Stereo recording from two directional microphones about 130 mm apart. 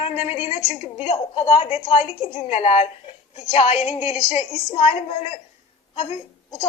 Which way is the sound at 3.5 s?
50° left (ahead or behind).